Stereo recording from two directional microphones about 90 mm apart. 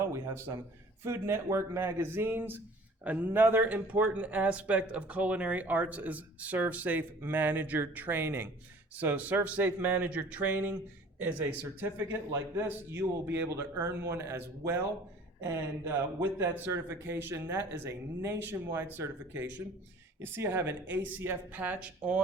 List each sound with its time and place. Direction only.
0.0 s speech: 30° right (ahead or behind)
15.9 s speech: 25° right (ahead or behind)